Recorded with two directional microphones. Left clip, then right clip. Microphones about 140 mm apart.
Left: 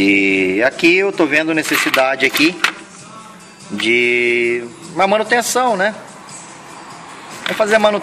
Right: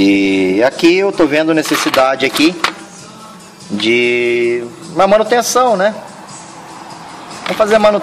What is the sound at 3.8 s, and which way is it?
A man's voice, 15° right (ahead or behind).